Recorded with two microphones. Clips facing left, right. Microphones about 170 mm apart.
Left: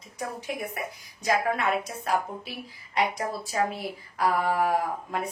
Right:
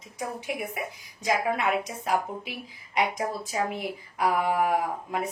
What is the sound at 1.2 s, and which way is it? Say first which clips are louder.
Speech: even; 15° right (ahead or behind).